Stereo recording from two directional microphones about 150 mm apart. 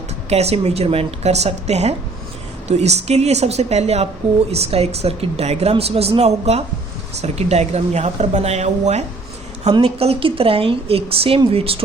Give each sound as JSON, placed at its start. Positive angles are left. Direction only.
{"t": 0.3, "sound": "a woman's voice", "side_deg": -45}